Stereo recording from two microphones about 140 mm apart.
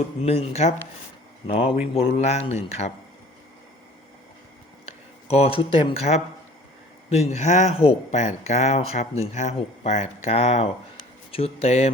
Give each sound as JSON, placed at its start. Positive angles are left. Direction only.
{"t": 0.2, "sound": "speech", "side_deg": 50}
{"t": 5.3, "sound": "speech", "side_deg": 45}